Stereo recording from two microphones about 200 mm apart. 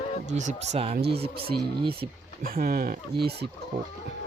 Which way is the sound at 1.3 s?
50° right (ahead or behind).